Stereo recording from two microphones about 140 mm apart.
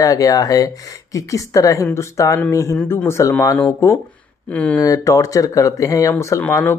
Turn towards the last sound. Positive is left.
turn(degrees=15)  # may be behind; listen again after turning